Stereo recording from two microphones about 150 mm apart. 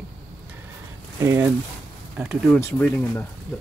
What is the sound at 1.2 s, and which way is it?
Speech, 15° right (ahead or behind).